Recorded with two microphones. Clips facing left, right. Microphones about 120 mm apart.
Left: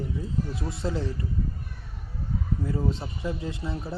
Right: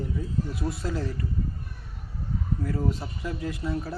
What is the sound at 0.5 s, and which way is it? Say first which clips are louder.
Speech: even; 25° left (ahead or behind).